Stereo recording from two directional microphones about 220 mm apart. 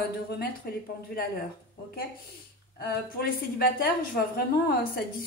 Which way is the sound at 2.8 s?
45° left (ahead or behind).